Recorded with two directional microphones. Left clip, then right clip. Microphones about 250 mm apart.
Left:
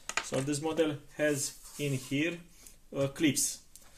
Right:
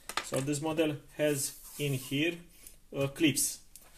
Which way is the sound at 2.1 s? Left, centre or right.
Left.